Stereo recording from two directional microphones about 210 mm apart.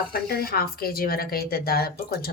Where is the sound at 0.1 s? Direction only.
45° left (ahead or behind).